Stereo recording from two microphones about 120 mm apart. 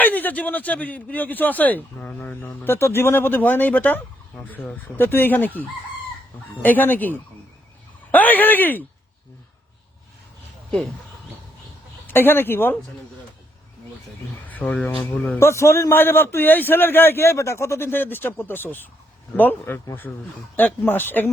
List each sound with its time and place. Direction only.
0.0 s speech: 15° left (ahead or behind)
6.6 s speech: 15° left (ahead or behind)
12.0 s speech: 15° left (ahead or behind)
14.4 s speech: 15° left (ahead or behind)